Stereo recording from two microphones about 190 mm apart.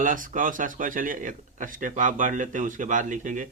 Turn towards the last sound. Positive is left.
turn(degrees=-40)  # may be behind; listen again after turning